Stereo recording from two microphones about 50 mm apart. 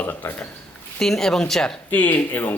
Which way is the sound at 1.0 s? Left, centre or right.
Centre.